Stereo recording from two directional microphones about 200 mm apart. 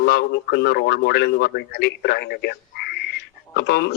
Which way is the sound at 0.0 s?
50° left (ahead or behind).